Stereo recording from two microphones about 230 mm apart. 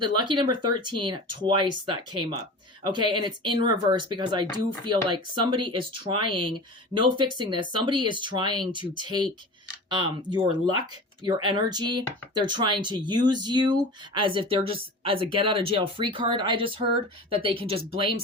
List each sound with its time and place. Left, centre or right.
0.0 s speech: centre